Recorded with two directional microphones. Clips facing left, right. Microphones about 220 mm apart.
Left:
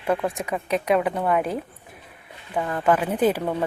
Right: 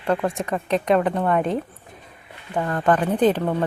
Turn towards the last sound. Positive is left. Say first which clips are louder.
# right 2 dB
turn(degrees=10)  # may be behind; listen again after turning